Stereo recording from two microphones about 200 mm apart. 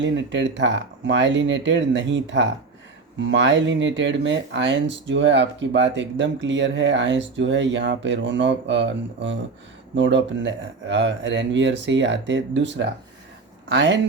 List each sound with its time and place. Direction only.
0.0 s speech: 65° right (ahead or behind)